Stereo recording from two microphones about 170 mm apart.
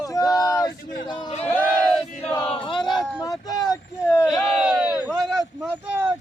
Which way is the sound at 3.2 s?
20° left (ahead or behind).